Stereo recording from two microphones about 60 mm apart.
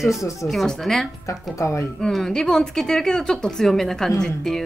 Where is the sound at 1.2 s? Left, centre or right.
Left.